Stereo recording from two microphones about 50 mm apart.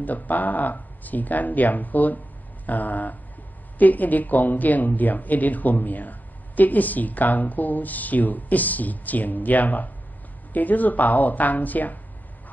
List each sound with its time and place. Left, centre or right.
0.0 s speech: left